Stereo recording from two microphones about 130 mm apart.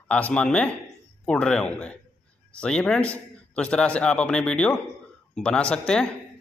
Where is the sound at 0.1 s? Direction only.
10° left (ahead or behind).